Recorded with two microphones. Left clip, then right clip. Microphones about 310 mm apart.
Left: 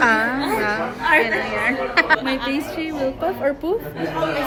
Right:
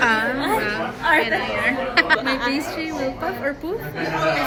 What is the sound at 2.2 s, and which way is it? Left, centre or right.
Speech, centre.